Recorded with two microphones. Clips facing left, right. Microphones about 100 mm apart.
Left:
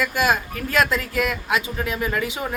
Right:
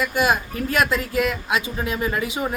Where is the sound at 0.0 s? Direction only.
20° right (ahead or behind).